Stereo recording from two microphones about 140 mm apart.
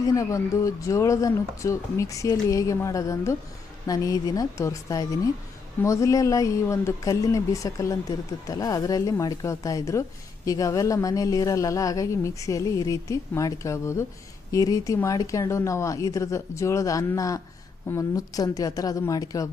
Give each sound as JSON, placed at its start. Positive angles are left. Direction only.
{"t": 0.0, "sound": "speech", "side_deg": 25}